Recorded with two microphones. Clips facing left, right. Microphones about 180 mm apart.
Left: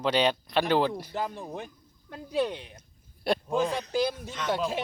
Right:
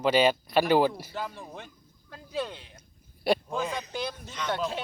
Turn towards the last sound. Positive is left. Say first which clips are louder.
# left 2 dB
turn(degrees=10)  # may be behind; listen again after turning